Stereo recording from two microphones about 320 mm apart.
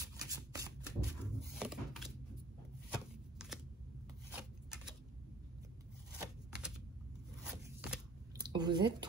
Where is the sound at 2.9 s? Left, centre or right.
Centre.